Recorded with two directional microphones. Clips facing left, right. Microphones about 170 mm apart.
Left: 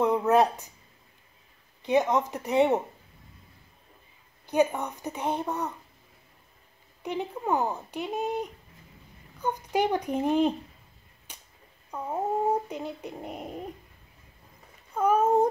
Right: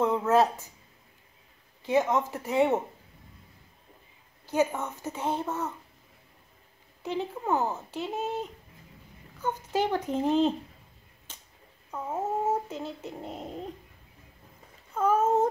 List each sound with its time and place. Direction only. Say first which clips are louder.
0.0 s speech: left 1 dB; 15° left (ahead or behind)
1.8 s a child's voice: left 1 dB; 20° left (ahead or behind)
4.5 s a child's voice: left 2 dB; 15° left (ahead or behind)
7.0 s a child's voice: even; 15° left (ahead or behind)
11.3 s a sound: left 1 dB; 15° left (ahead or behind)
12.2 s a child's voice: left 2 dB; 15° left (ahead or behind)
15.0 s a child's voice: left 2 dB; 15° left (ahead or behind)